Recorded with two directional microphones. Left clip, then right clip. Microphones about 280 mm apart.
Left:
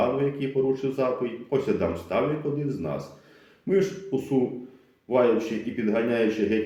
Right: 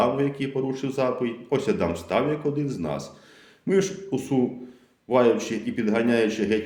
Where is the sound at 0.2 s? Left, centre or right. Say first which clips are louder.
Left 1 dB; right.